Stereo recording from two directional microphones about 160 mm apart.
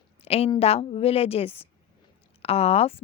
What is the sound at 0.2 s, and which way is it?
A woman's voice, 40° left (ahead or behind).